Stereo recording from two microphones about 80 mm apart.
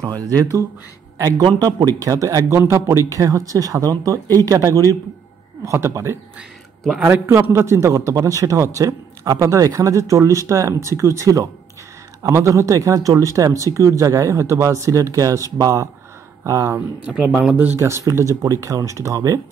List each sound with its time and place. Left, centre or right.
0.0 s speech: right
1.4 s speech: right
1.8 s speech: right
2.6 s a man's voice: right
3.1 s a man's voice: right
17.0 s speech: centre
17.7 s a man's voice: right